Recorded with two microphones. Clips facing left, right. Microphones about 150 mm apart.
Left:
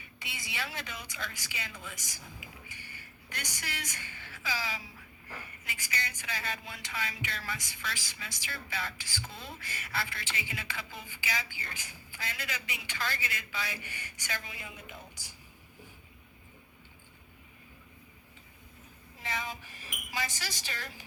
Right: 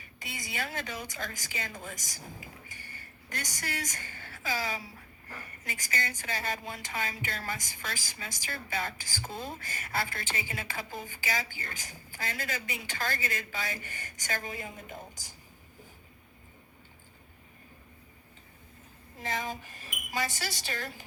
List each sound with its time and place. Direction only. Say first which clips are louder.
0.0 s a woman's voice: right 3 dB; 45° right (ahead or behind)
19.2 s a woman's voice: right 3 dB; 50° right (ahead or behind)